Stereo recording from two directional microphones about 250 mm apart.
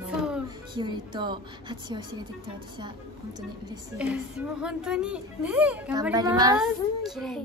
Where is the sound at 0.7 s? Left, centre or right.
Centre.